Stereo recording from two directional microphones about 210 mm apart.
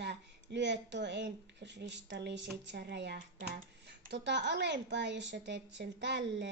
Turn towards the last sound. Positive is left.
turn(degrees=-55)  # may be behind; listen again after turning